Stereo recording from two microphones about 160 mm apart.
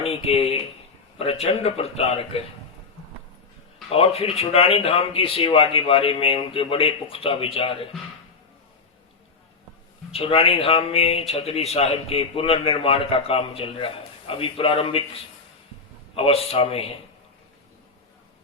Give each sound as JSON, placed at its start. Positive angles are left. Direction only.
{"t": 0.0, "sound": "a man's voice", "side_deg": 40}
{"t": 3.8, "sound": "a man's voice", "side_deg": 35}
{"t": 10.1, "sound": "a man's voice", "side_deg": 35}